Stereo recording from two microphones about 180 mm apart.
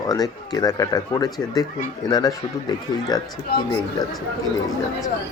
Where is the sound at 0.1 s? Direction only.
20° left (ahead or behind).